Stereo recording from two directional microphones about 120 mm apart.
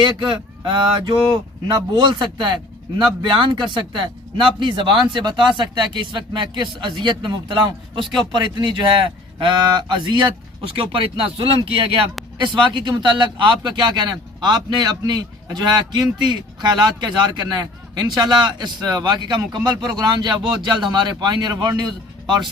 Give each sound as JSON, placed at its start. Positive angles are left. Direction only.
{"t": 0.0, "sound": "a man's voice", "side_deg": -40}